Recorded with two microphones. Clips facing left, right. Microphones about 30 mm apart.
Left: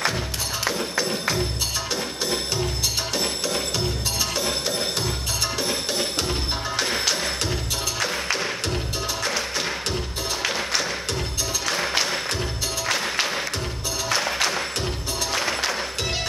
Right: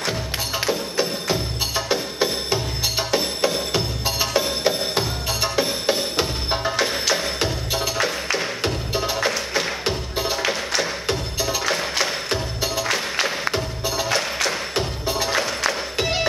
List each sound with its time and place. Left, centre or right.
0.9 s music: centre
6.8 s music: centre
7.3 s music: centre
12.8 s music: centre
13.5 s music: centre